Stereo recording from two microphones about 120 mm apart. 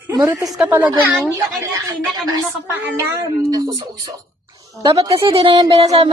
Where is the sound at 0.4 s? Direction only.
Centre (ahead or behind).